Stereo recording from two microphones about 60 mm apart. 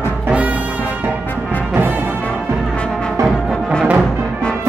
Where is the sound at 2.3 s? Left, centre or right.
Centre.